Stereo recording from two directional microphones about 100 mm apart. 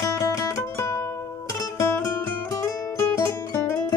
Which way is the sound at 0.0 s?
30° left (ahead or behind).